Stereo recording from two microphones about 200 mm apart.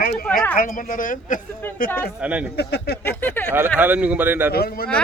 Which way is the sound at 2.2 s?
5° right (ahead or behind).